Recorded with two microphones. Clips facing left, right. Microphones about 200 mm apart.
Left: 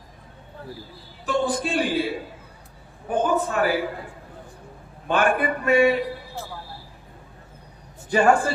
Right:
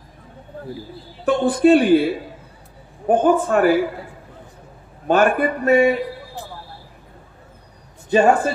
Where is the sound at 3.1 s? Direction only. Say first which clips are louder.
Right 7 dB; 50° right (ahead or behind).